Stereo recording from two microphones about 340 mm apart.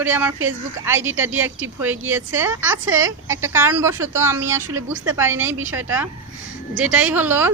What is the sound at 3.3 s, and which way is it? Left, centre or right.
A woman's voice, centre.